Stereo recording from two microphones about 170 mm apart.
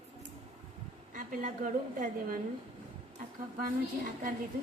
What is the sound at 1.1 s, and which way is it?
A woman's voice, 50° right (ahead or behind).